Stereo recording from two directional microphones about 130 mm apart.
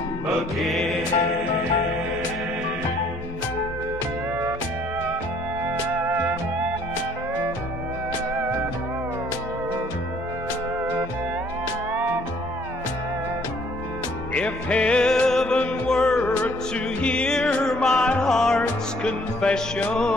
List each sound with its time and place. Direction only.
0.3 s music: centre (ahead or behind)
6.0 s music: 15° right (ahead or behind)
14.3 s music: 10° left (ahead or behind)